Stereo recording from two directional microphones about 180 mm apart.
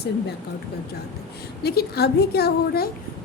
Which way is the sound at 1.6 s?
60° left (ahead or behind).